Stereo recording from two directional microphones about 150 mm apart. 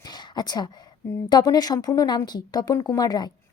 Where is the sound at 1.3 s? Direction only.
25° left (ahead or behind).